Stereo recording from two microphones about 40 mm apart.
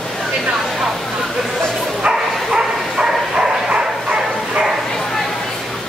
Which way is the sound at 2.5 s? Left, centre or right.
Centre.